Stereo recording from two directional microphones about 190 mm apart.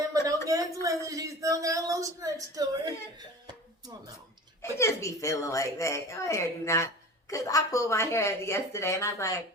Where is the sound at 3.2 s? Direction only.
20° right (ahead or behind).